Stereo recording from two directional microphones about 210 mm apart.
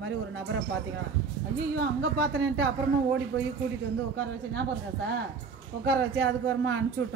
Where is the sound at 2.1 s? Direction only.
55° right (ahead or behind).